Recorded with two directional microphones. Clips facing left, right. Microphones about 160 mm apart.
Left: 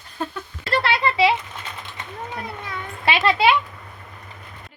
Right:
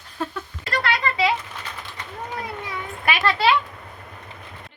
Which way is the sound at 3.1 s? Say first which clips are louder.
Left 2 dB; 25° left (ahead or behind).